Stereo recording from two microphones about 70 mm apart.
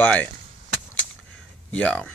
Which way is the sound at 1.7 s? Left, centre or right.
Centre.